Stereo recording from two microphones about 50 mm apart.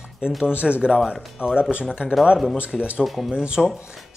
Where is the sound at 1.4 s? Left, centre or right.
Centre.